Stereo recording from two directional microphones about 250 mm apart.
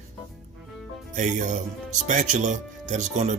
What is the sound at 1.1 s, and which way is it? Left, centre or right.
Speech, right.